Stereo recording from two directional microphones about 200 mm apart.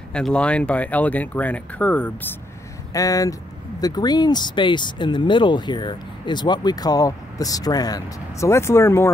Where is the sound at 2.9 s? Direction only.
15° left (ahead or behind).